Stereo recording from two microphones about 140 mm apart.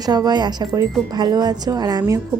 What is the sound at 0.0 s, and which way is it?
A woman's voice, 30° right (ahead or behind).